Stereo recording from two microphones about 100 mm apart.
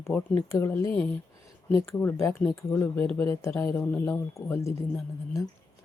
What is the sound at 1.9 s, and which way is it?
Speech, 20° left (ahead or behind).